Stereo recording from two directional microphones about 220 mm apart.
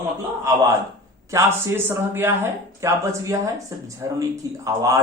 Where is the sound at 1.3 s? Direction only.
10° right (ahead or behind).